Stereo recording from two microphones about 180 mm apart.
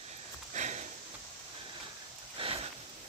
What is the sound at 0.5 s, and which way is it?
Sniff, 40° right (ahead or behind).